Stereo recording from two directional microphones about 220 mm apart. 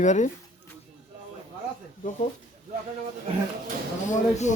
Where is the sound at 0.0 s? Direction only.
35° left (ahead or behind).